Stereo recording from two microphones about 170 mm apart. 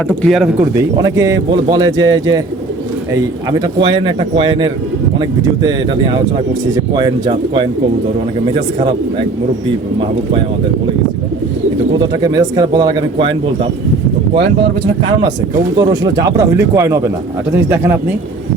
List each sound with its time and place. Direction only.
0.2 s speech: centre (ahead or behind)
0.8 s speech: 20° right (ahead or behind)
3.6 s speech: 30° right (ahead or behind)
6.9 s speech: 25° right (ahead or behind)
11.9 s speech: 25° right (ahead or behind)
15.8 s speech: 25° right (ahead or behind)